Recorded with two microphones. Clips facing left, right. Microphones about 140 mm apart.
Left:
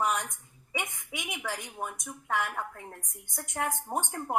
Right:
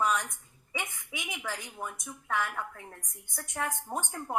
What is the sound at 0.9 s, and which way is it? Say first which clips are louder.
A woman's voice: left 2 dB; 20° left (ahead or behind).